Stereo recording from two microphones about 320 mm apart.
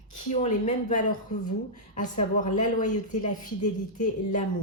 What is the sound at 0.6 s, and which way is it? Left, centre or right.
Speech, left.